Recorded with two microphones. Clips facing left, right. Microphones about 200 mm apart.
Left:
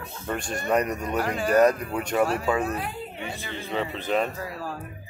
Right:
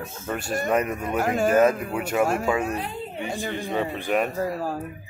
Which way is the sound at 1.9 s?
5° right (ahead or behind).